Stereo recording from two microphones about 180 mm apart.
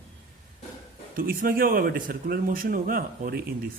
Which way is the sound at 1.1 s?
50° right (ahead or behind).